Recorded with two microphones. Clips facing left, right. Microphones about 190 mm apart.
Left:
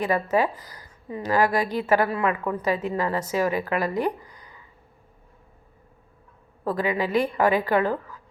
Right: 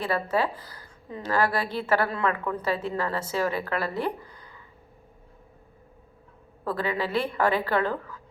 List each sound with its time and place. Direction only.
0.0 s a woman's voice: 10° left (ahead or behind)
6.7 s a woman's voice: 15° left (ahead or behind)